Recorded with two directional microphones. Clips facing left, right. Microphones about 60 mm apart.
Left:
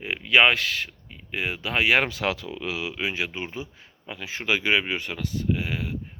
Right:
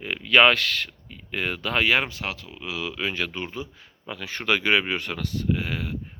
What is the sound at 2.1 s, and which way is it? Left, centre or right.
Speech, left.